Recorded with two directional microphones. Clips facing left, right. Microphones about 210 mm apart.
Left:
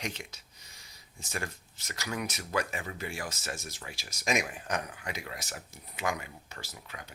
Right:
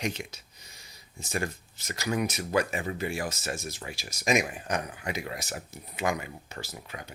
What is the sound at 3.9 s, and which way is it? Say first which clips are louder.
Speech: right 5 dB; 10° right (ahead or behind).